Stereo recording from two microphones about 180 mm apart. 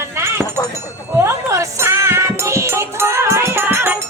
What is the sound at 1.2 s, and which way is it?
Music, 15° right (ahead or behind).